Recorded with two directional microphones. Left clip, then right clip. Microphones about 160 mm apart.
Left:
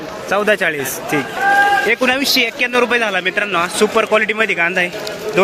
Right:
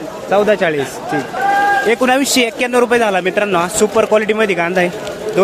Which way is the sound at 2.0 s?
40° right (ahead or behind).